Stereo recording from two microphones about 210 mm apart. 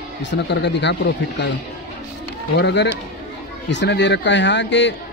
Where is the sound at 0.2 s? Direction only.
55° left (ahead or behind).